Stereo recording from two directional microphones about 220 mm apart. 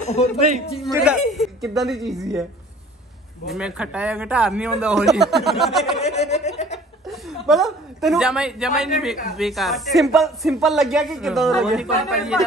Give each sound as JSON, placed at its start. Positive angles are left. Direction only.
{"t": 0.0, "sound": "speech", "side_deg": 30}
{"t": 1.3, "sound": "a man's voice", "side_deg": 0}
{"t": 3.4, "sound": "a man's voice", "side_deg": -5}
{"t": 6.0, "sound": "speech", "side_deg": 30}
{"t": 7.1, "sound": "a man's voice", "side_deg": 0}